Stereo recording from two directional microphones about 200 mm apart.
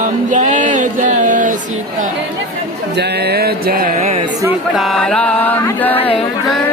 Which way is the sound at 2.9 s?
55° right (ahead or behind).